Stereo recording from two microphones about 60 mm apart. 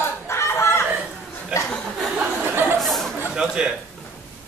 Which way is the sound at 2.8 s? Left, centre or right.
Centre.